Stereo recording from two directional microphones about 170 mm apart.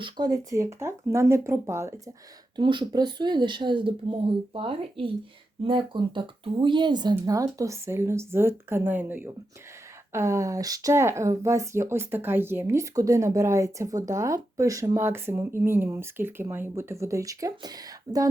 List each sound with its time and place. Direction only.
0.0 s speech: 20° right (ahead or behind)
2.6 s speech: 25° right (ahead or behind)